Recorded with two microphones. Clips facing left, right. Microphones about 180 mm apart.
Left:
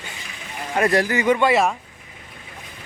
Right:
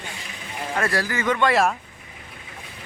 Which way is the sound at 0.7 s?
20° left (ahead or behind).